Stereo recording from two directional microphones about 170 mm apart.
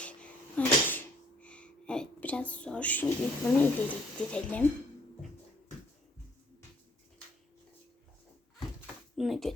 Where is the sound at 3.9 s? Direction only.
10° left (ahead or behind).